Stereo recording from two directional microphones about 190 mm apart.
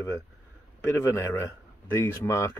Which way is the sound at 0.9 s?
15° left (ahead or behind).